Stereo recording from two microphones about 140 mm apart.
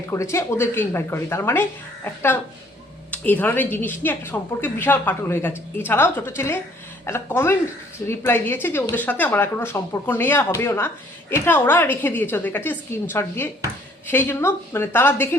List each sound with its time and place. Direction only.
0.1 s a woman's voice: 20° left (ahead or behind)
3.1 s a woman's voice: 10° left (ahead or behind)